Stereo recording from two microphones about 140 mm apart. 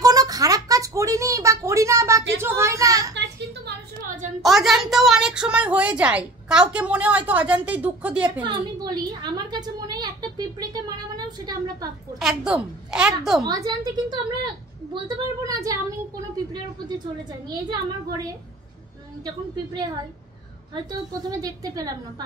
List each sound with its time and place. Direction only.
0.0 s a sound: 25° right (ahead or behind)
4.4 s a sound: centre (ahead or behind)
8.8 s a woman's voice: 30° right (ahead or behind)
12.2 s a woman's voice: 5° right (ahead or behind)
13.4 s a woman's voice: 30° right (ahead or behind)
21.3 s a woman's voice: 25° right (ahead or behind)